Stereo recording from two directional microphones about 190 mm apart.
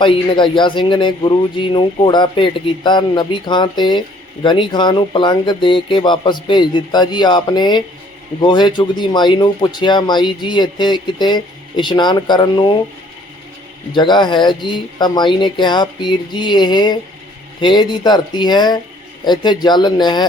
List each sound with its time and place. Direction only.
0.0 s speech: 25° left (ahead or behind)
13.9 s speech: 25° left (ahead or behind)